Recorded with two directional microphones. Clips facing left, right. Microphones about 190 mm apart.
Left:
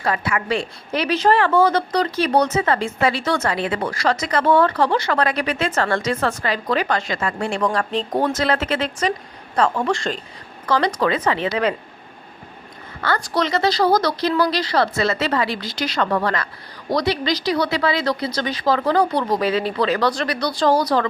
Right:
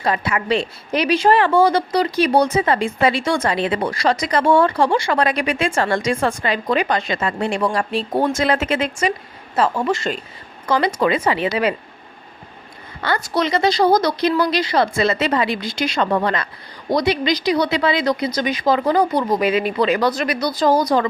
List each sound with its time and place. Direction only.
0.0 s a woman's voice: 20° right (ahead or behind)
7.6 s a woman's voice: 10° right (ahead or behind)
13.1 s a woman's voice: 10° right (ahead or behind)